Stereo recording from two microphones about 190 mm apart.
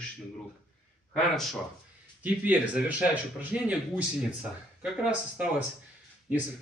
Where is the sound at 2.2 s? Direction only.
10° right (ahead or behind).